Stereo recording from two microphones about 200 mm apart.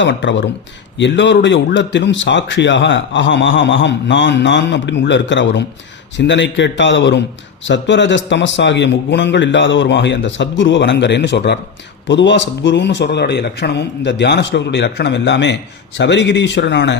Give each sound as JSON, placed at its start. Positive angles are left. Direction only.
{"t": 0.0, "sound": "a man's voice", "side_deg": 65}